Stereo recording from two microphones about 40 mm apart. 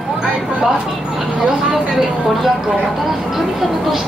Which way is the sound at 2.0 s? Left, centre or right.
Centre.